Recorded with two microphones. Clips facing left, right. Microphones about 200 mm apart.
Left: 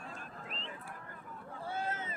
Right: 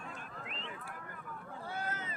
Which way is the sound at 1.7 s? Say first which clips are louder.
Left 3 dB; 25° left (ahead or behind).